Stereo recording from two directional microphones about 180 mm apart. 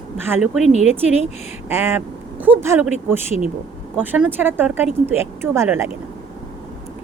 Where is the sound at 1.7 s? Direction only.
10° right (ahead or behind).